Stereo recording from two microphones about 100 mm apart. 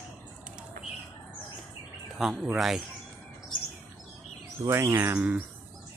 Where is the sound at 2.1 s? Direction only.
5° right (ahead or behind).